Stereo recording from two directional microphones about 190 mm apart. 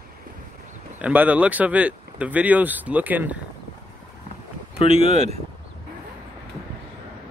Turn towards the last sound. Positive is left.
turn(degrees=-35)  # may be behind; listen again after turning